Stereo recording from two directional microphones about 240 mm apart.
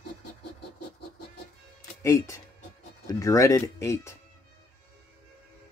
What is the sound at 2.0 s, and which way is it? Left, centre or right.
Speech, centre.